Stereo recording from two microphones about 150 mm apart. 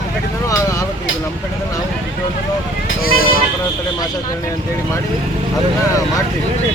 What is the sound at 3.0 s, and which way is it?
Speech, 75° left (ahead or behind).